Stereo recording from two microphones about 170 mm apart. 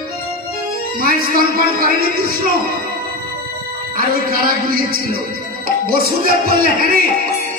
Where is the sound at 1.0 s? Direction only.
55° right (ahead or behind).